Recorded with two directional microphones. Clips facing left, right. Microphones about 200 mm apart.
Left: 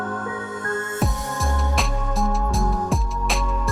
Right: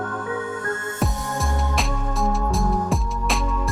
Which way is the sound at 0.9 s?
Centre (ahead or behind).